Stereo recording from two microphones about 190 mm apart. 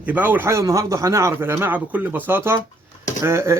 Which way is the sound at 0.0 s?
10° right (ahead or behind).